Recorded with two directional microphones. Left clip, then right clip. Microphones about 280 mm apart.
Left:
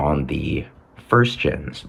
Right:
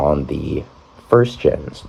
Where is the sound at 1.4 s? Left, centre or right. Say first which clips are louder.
Right 6 dB; right.